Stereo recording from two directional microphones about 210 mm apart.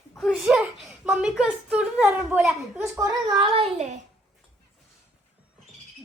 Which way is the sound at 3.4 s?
25° right (ahead or behind).